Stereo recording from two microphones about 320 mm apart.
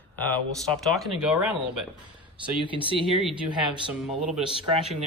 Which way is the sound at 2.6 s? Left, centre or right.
Centre.